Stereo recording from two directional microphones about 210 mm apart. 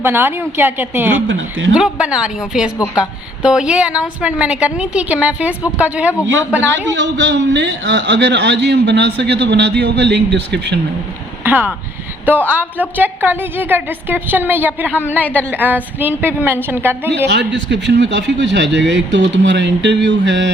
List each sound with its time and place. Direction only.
0.0 s a woman's voice: 10° right (ahead or behind)
1.3 s speech: 65° right (ahead or behind)
1.7 s a woman's voice: 5° right (ahead or behind)
6.9 s a man's voice: 60° right (ahead or behind)
11.4 s a woman's voice: 10° right (ahead or behind)
15.2 s a woman's voice: 10° left (ahead or behind)
15.4 s a woman's voice: 10° right (ahead or behind)
17.2 s a man's voice: 55° right (ahead or behind)